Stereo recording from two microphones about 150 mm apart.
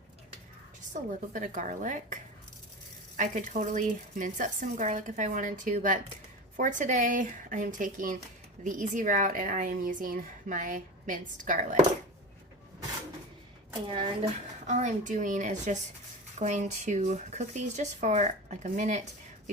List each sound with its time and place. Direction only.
0.9 s speech: 60° right (ahead or behind)
3.2 s speech: 55° right (ahead or behind)
13.8 s a woman's voice: 35° right (ahead or behind)
14.7 s speech: 55° right (ahead or behind)